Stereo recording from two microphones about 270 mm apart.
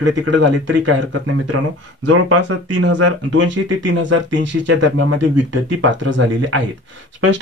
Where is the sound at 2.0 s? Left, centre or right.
Right.